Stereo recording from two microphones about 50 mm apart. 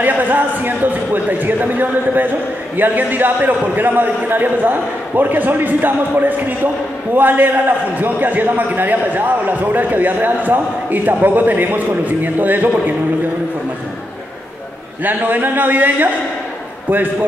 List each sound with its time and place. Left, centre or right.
0.0 s a man's voice: right
15.0 s a man's voice: right